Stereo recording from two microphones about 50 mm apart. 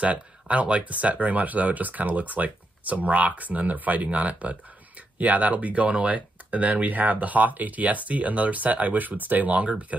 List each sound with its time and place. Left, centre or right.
0.0 s speech: right